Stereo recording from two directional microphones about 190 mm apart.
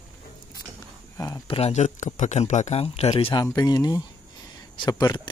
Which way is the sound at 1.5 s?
35° left (ahead or behind).